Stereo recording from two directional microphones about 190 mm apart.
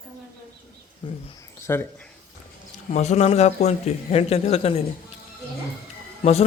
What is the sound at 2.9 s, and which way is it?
Speech, 35° left (ahead or behind).